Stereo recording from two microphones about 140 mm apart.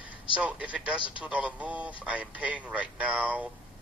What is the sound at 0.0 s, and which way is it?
A man's voice, 10° right (ahead or behind).